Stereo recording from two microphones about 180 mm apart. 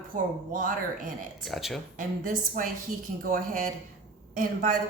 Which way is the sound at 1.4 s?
Centre (ahead or behind).